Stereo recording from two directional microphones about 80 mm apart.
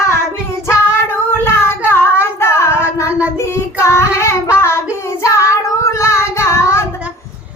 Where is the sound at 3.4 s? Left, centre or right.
Left.